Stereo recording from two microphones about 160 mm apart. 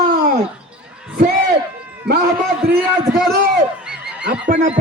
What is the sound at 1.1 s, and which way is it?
Crowd, 65° right (ahead or behind).